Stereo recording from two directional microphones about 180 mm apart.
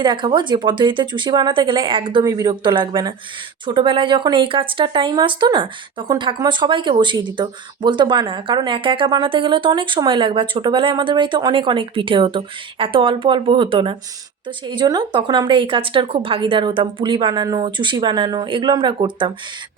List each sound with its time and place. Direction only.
0.0 s speech: 25° right (ahead or behind)